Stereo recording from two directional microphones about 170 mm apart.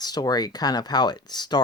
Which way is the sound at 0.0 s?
25° left (ahead or behind).